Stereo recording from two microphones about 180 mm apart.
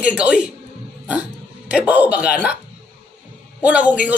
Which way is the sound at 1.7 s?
10° right (ahead or behind).